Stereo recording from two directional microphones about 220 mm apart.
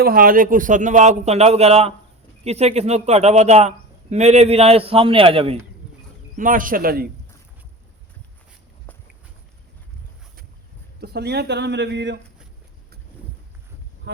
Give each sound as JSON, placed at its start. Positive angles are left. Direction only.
{"t": 0.0, "sound": "speech", "side_deg": -40}
{"t": 6.3, "sound": "speech", "side_deg": -40}
{"t": 11.0, "sound": "speech", "side_deg": -50}